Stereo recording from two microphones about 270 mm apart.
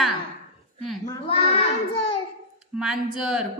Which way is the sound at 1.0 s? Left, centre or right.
Left.